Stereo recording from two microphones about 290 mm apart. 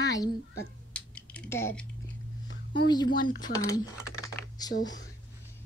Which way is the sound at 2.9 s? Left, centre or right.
Centre.